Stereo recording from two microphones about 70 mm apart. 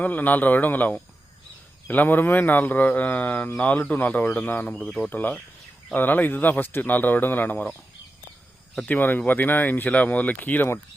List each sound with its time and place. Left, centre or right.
0.0 s a man's voice: left
8.9 s a man's voice: left